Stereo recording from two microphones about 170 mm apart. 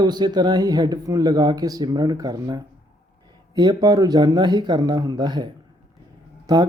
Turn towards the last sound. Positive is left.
turn(degrees=-25)  # may be behind; listen again after turning